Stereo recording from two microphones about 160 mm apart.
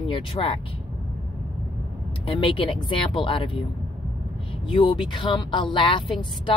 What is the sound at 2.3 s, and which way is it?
Speech, 35° left (ahead or behind).